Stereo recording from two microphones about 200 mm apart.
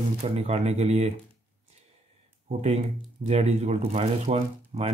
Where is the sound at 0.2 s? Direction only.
30° right (ahead or behind).